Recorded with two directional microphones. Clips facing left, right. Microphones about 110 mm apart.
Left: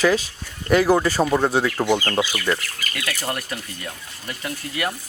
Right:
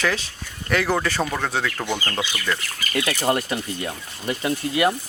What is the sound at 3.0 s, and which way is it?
Speech, 25° right (ahead or behind).